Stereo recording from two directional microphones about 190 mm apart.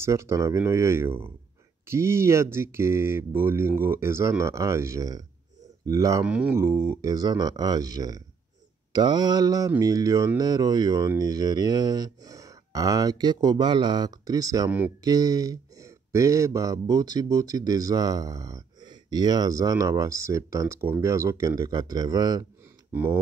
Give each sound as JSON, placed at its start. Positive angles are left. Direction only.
{"t": 0.0, "sound": "speech", "side_deg": -15}
{"t": 6.2, "sound": "speech", "side_deg": -5}